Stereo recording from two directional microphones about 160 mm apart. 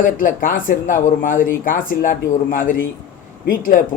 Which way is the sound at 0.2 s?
55° left (ahead or behind).